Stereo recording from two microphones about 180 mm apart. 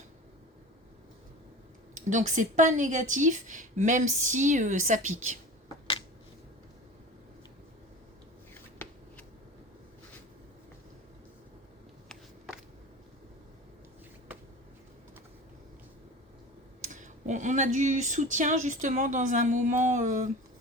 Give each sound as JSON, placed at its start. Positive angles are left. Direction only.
{"t": 2.0, "sound": "speech", "side_deg": -45}
{"t": 16.9, "sound": "speech", "side_deg": -45}